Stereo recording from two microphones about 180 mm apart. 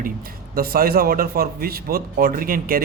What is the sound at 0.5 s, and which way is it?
A man's voice, 55° right (ahead or behind).